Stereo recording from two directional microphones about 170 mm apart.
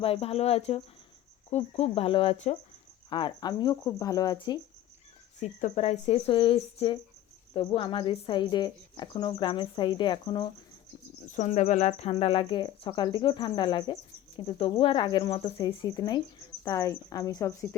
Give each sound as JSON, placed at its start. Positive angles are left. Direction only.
{"t": 0.0, "sound": "speech", "side_deg": 35}
{"t": 3.1, "sound": "speech", "side_deg": 25}
{"t": 5.4, "sound": "speech", "side_deg": 45}
{"t": 11.3, "sound": "speech", "side_deg": 45}